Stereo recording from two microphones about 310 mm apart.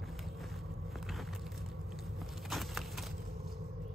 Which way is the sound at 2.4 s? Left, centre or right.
Centre.